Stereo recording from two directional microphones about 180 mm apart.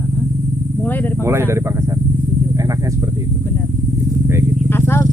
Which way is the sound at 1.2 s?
15° right (ahead or behind).